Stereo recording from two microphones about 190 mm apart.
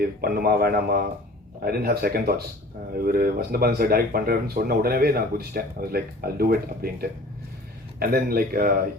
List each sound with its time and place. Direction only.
0.0 s speech: 50° right (ahead or behind)